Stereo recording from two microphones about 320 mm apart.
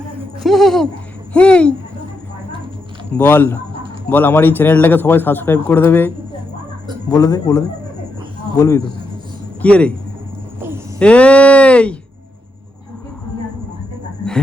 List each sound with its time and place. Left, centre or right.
0.2 s a sound: centre
1.3 s speech: centre
3.1 s a man's voice: centre
11.0 s speech: centre